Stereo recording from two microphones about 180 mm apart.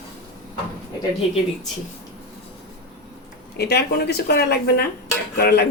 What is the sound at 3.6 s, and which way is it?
Speech, 65° left (ahead or behind).